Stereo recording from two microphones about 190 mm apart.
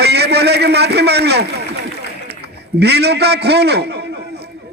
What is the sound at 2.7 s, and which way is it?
A man's voice, 60° right (ahead or behind).